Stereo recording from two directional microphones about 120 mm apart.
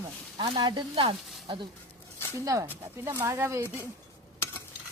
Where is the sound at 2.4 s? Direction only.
25° right (ahead or behind).